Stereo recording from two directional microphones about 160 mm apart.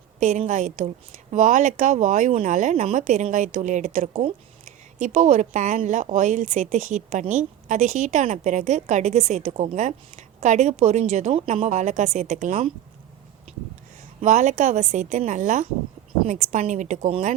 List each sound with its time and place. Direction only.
0.2 s a woman's voice: 50° right (ahead or behind)
14.2 s a woman's voice: 50° right (ahead or behind)